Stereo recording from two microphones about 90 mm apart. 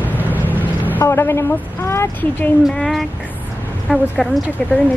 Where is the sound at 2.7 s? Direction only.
5° left (ahead or behind).